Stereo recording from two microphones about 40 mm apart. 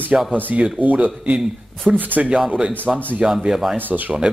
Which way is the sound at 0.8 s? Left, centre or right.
Right.